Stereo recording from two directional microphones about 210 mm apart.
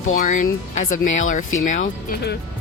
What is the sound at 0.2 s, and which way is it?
Speech, 35° left (ahead or behind).